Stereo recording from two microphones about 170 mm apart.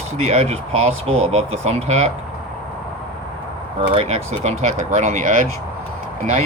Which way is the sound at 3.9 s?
40° right (ahead or behind).